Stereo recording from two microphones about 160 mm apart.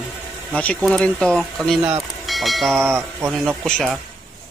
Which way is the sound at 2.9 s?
15° right (ahead or behind).